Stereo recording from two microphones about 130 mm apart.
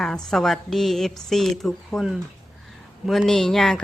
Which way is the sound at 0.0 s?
5° left (ahead or behind).